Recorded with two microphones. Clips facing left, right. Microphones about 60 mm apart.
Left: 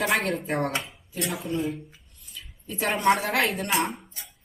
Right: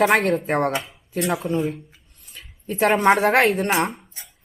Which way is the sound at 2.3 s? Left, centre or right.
Right.